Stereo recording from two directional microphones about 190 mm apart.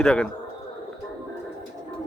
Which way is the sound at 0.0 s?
5° left (ahead or behind).